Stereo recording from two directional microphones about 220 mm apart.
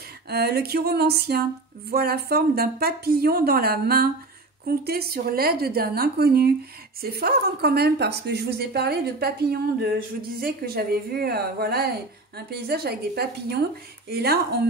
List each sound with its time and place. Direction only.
0.3 s speech: 45° right (ahead or behind)